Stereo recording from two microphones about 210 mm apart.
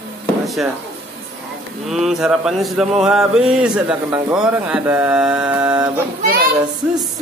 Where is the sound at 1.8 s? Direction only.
Centre (ahead or behind).